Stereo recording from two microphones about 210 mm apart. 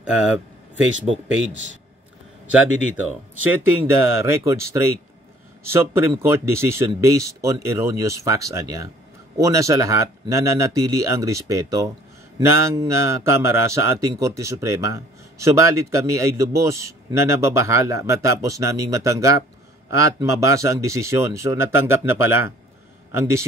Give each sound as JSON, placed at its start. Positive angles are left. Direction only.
{"t": 0.0, "sound": "speech", "side_deg": -5}
{"t": 3.8, "sound": "a man's voice", "side_deg": -10}